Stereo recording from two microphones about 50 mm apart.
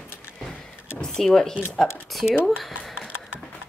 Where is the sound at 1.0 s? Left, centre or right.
Centre.